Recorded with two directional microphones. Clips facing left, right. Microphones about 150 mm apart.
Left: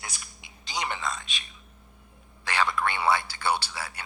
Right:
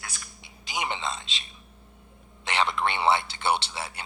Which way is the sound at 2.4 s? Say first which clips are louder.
Right 1 dB; 25° right (ahead or behind).